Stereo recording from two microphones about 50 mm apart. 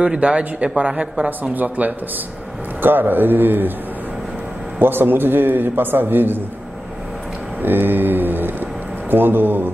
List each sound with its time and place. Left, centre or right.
0.0 s speech: centre
1.5 s mantra: right
4.7 s a man's voice: right
7.6 s mantra: right
9.1 s a man's voice: right